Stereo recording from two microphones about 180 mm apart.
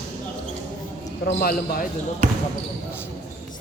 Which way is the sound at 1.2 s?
55° left (ahead or behind).